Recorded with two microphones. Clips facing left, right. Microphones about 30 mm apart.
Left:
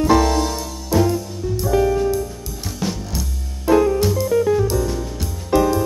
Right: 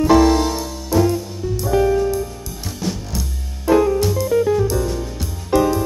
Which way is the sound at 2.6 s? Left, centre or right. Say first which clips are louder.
Even; centre.